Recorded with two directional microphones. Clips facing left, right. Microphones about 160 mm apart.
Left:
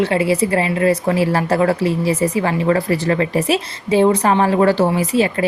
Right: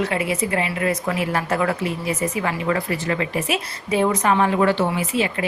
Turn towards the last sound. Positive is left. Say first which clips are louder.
# left 6 dB
turn(degrees=40)  # may be behind; listen again after turning